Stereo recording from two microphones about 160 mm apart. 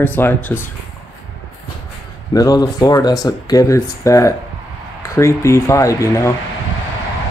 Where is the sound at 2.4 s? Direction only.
25° left (ahead or behind).